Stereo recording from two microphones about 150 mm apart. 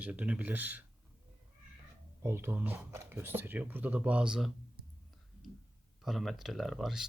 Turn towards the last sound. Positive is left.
turn(degrees=0)  # may be behind; listen again after turning